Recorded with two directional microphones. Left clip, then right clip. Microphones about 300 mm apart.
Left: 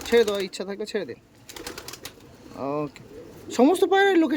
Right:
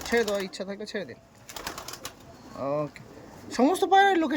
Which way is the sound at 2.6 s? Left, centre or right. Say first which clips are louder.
Left 1 dB; centre.